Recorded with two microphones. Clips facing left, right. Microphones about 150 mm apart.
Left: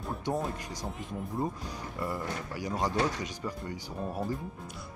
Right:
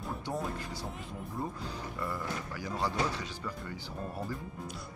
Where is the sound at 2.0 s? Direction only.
15° left (ahead or behind).